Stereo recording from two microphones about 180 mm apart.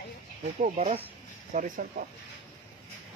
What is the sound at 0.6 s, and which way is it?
Speech, 40° right (ahead or behind).